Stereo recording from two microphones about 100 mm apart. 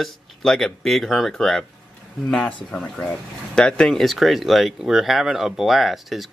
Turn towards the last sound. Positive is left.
turn(degrees=0)  # may be behind; listen again after turning